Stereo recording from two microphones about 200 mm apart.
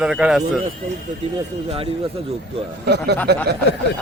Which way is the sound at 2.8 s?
55° right (ahead or behind).